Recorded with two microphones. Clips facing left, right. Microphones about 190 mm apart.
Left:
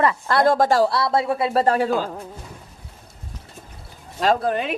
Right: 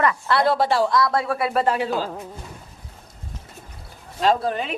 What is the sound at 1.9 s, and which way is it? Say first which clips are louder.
Speech: left 2 dB; centre (ahead or behind).